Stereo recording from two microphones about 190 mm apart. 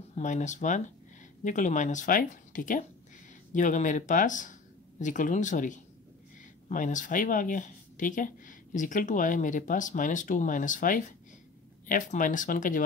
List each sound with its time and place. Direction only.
0.1 s speech: 40° left (ahead or behind)